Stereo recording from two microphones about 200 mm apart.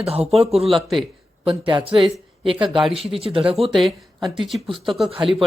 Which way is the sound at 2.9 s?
30° right (ahead or behind).